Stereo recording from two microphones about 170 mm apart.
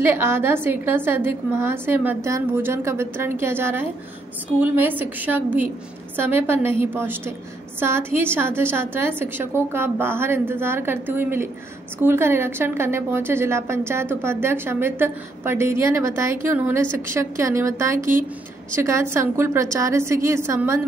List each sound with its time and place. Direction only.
0.0 s a woman's voice: 15° right (ahead or behind)